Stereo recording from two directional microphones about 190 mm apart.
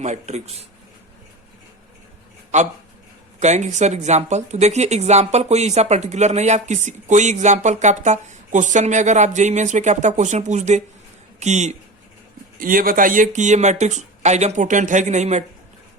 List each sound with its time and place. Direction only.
0.0 s speech: 35° right (ahead or behind)
2.5 s speech: 40° right (ahead or behind)
12.5 s speech: 45° right (ahead or behind)